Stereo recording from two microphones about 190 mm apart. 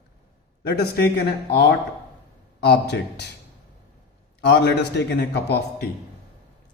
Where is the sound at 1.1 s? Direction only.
60° left (ahead or behind).